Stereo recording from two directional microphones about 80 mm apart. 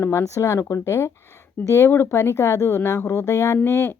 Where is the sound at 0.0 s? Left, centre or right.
Left.